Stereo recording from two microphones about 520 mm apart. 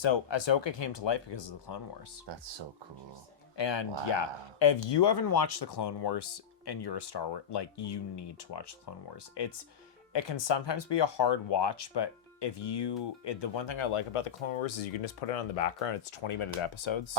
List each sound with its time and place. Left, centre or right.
0.0 s speech: left
2.2 s speech: right
3.6 s speech: left